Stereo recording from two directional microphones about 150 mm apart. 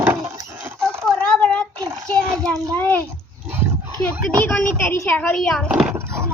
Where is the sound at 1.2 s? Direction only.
10° left (ahead or behind).